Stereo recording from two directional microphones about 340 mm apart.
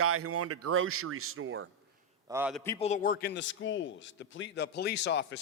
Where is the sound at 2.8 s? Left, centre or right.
Left.